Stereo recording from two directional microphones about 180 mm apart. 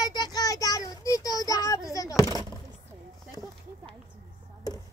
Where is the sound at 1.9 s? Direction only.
20° left (ahead or behind).